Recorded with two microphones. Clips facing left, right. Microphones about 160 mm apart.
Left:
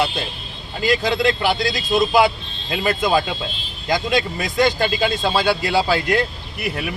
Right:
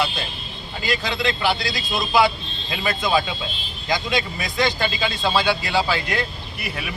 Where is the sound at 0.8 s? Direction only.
50° left (ahead or behind).